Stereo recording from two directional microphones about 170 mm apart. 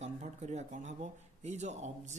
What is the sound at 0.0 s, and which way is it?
Speech, 40° right (ahead or behind).